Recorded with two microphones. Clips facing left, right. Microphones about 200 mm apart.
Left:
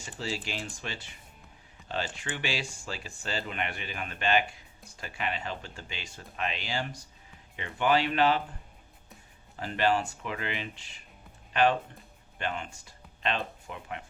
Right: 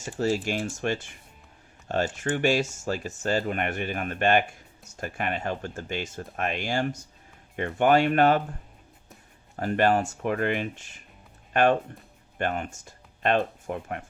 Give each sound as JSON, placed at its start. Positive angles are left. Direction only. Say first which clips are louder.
{"t": 0.0, "sound": "speech", "louder": "right 10 dB", "side_deg": -45}
{"t": 9.6, "sound": "speech", "louder": "right 5 dB", "side_deg": -50}